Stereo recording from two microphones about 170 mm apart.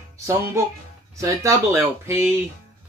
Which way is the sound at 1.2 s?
20° right (ahead or behind).